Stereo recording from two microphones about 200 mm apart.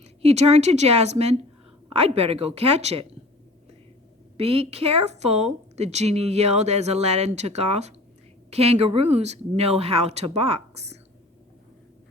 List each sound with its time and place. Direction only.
0.0 s a woman's voice: 30° right (ahead or behind)
4.4 s a woman's voice: 30° right (ahead or behind)